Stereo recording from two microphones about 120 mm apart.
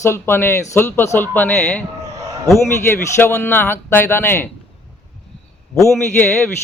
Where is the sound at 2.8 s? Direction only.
20° left (ahead or behind).